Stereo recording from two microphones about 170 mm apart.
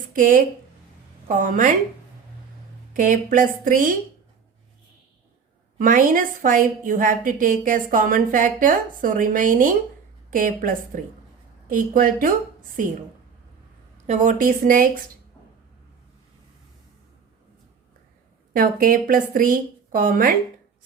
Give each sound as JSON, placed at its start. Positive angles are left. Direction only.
{"t": 0.1, "sound": "a woman's voice", "side_deg": -50}
{"t": 2.9, "sound": "a woman's voice", "side_deg": -50}
{"t": 5.7, "sound": "a woman's voice", "side_deg": -50}
{"t": 14.1, "sound": "a woman's voice", "side_deg": -50}
{"t": 18.5, "sound": "a woman's voice", "side_deg": -55}